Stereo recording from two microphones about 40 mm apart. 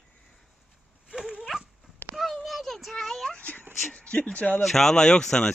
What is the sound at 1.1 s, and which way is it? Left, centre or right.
Dog, centre.